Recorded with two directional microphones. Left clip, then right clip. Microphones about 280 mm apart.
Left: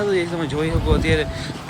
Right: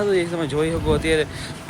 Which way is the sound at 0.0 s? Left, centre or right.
Centre.